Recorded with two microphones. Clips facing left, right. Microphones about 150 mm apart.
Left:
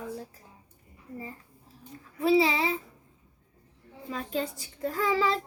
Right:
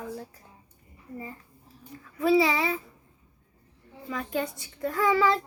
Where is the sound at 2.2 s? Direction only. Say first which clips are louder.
Right 1 dB; 25° left (ahead or behind).